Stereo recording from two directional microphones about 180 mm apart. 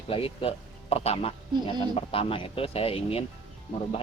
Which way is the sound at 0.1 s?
30° left (ahead or behind).